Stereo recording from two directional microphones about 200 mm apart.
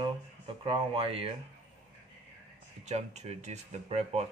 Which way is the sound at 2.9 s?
35° right (ahead or behind).